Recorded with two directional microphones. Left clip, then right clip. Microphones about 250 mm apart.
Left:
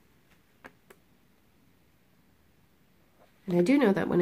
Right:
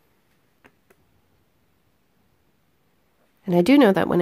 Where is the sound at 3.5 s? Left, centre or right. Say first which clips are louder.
Right 8 dB; right.